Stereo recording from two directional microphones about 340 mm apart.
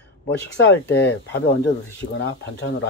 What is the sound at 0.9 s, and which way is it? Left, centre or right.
Speech, left.